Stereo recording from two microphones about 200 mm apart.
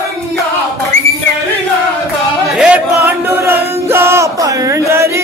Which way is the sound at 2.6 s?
10° right (ahead or behind).